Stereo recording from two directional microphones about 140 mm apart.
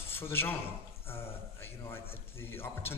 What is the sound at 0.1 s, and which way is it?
A man's voice, 15° left (ahead or behind).